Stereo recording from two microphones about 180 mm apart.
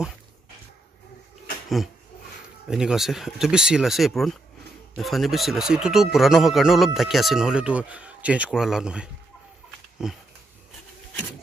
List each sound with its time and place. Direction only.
2.7 s speech: 5° right (ahead or behind)